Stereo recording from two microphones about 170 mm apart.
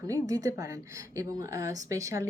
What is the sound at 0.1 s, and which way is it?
A woman's voice, 20° right (ahead or behind).